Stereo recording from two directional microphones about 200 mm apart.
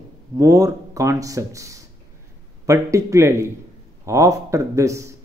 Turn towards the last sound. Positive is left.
turn(degrees=-15)  # may be behind; listen again after turning